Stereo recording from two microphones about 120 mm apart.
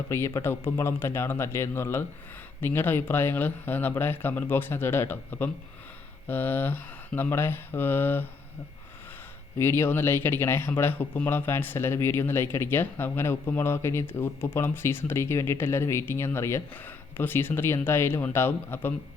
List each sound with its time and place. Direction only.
0.1 s speech: 25° left (ahead or behind)
9.6 s speech: 20° left (ahead or behind)